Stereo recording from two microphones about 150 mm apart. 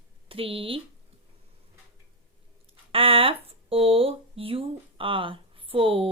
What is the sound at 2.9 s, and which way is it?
Speech, 40° right (ahead or behind).